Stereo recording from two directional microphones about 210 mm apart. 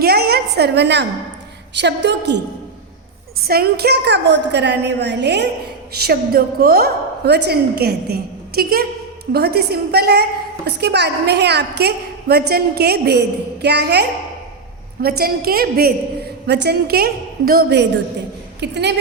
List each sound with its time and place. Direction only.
0.0 s a sound: 50° right (ahead or behind)
1.7 s a woman's voice: 55° right (ahead or behind)
3.4 s a woman's voice: 45° right (ahead or behind)